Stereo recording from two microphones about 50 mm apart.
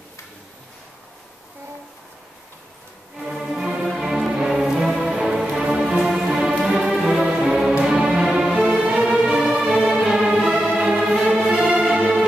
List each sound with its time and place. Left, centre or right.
3.3 s music: centre
8.7 s music: right
9.2 s music: centre
11.7 s music: right